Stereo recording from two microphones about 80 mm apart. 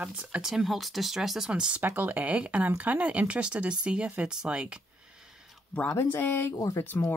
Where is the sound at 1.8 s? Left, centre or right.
Right.